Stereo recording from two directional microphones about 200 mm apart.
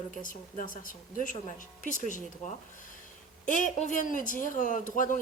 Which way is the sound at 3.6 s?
40° left (ahead or behind).